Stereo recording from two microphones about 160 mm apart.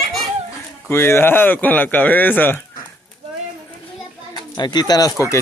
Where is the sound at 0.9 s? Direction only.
15° left (ahead or behind).